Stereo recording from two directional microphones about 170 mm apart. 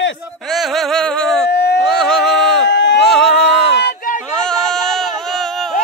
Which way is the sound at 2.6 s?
90° left.